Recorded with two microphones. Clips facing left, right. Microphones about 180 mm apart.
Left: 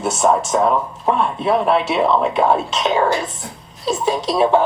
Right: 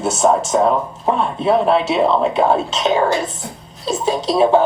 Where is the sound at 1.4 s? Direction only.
25° right (ahead or behind).